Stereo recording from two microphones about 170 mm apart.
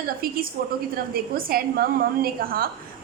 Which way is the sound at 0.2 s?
60° right (ahead or behind).